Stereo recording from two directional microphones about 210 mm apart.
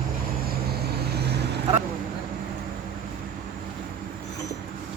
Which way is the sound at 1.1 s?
50° right (ahead or behind).